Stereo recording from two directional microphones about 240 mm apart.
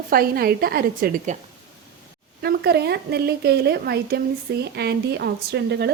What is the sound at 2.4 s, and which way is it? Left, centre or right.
A woman's voice, right.